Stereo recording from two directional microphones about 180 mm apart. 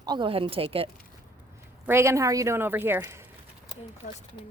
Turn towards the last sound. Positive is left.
turn(degrees=-10)  # may be behind; listen again after turning